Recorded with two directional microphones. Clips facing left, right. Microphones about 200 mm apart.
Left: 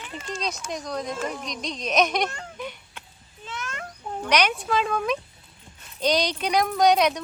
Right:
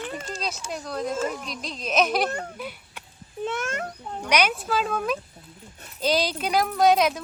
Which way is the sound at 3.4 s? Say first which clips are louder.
Right 8 dB; 55° right (ahead or behind).